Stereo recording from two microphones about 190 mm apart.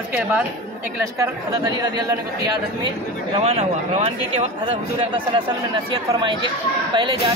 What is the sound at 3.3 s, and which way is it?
Speech, 30° right (ahead or behind).